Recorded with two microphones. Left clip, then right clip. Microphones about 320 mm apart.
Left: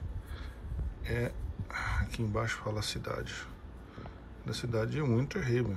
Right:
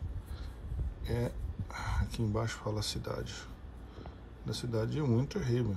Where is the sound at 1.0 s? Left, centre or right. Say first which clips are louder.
Left 1 dB; centre.